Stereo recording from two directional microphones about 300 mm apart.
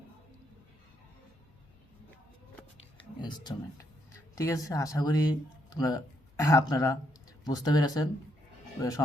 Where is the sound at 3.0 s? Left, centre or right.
Centre.